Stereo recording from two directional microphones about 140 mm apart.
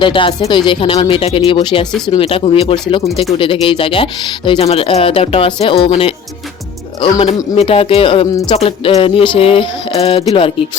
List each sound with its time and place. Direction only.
0.0 s speech: 35° left (ahead or behind)